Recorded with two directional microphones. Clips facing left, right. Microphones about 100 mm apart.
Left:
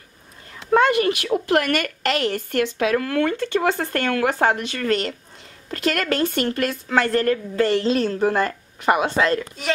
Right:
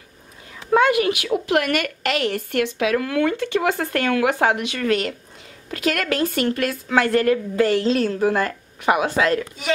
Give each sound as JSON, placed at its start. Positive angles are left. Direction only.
{"t": 0.7, "sound": "a woman's voice", "side_deg": -5}